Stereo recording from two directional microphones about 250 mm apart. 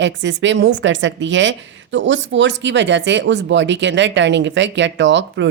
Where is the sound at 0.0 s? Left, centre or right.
Right.